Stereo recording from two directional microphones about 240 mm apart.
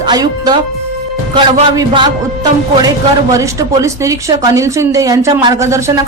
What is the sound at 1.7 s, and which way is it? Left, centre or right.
Speech, centre.